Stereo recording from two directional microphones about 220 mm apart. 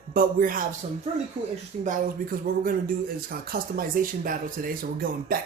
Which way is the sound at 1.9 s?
40° right (ahead or behind).